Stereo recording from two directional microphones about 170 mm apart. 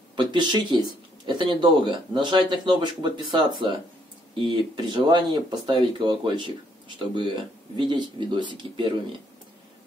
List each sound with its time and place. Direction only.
0.1 s speech: 25° right (ahead or behind)